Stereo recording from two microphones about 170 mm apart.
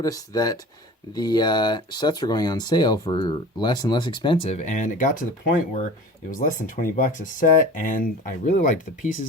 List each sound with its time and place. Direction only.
0.0 s speech: 20° left (ahead or behind)
4.5 s speech: 45° left (ahead or behind)